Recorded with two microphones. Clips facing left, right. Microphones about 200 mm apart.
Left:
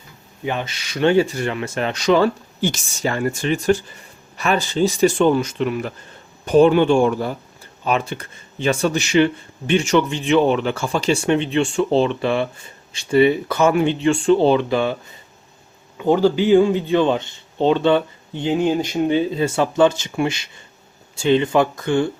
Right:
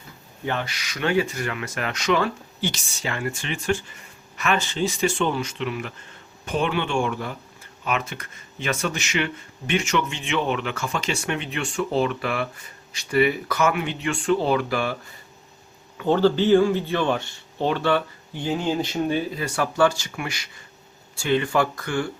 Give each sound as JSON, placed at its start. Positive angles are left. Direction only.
{"t": 0.4, "sound": "speech", "side_deg": 20}
{"t": 2.6, "sound": "speech", "side_deg": 45}
{"t": 16.0, "sound": "speech", "side_deg": 15}